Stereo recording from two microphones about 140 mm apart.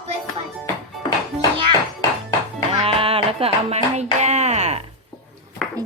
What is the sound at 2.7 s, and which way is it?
Music, 40° right (ahead or behind).